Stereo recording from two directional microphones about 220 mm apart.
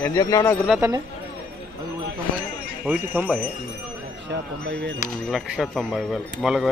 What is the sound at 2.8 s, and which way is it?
Speech, 5° right (ahead or behind).